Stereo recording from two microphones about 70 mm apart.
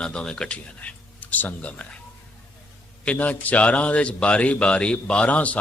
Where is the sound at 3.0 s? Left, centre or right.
Centre.